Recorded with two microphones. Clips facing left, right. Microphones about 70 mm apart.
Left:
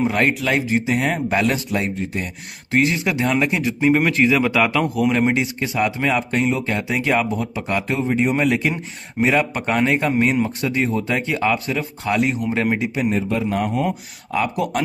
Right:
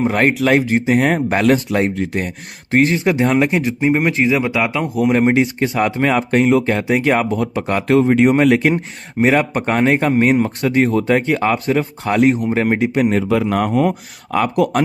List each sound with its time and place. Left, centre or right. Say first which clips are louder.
0.0 s speech: right 4 dB; right
3.8 s speech: left 1 dB; right
4.2 s speech: even; centre
4.9 s speech: right 4 dB; right
12.7 s speech: right 5 dB; right
13.3 s speech: right 5 dB; right